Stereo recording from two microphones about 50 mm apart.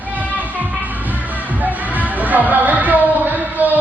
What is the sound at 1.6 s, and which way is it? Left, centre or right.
Music, right.